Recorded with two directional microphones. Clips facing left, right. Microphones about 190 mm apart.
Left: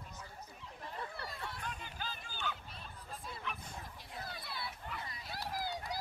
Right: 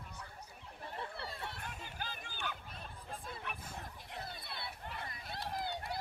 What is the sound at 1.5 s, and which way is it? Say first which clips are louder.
Chatter: left 1 dB; 55° right (ahead or behind).